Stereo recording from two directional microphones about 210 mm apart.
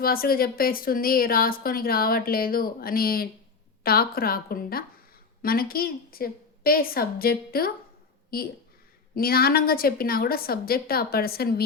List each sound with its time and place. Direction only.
0.0 s speech: 45° left (ahead or behind)